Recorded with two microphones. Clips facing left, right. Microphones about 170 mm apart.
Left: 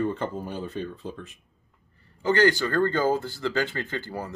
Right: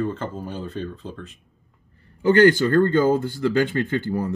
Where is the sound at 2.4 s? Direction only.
50° right (ahead or behind).